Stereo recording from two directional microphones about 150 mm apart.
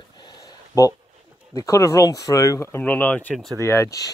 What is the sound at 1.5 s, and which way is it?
Speech, 20° left (ahead or behind).